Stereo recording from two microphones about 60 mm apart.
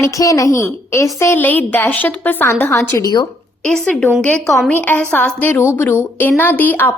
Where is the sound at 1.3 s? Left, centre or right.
Left.